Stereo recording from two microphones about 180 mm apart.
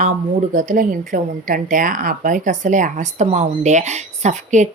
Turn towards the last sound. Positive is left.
turn(degrees=-40)  # may be behind; listen again after turning